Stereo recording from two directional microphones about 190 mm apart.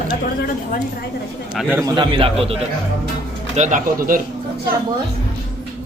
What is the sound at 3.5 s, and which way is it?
Speech, 40° right (ahead or behind).